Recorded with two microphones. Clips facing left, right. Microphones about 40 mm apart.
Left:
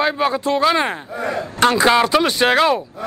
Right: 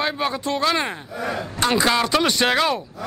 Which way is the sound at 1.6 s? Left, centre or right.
Left.